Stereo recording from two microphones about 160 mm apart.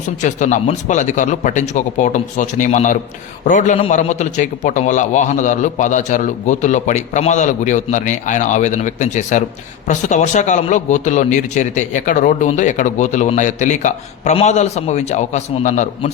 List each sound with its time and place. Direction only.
0.2 s a man's voice: 50° left (ahead or behind)